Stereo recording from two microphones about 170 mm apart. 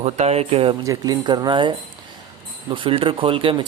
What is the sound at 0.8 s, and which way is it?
Speech, 20° right (ahead or behind).